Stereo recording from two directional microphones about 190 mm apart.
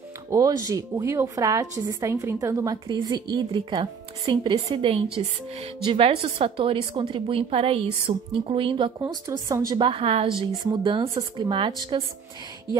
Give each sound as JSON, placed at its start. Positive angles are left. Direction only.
{"t": 0.3, "sound": "a woman's voice", "side_deg": -15}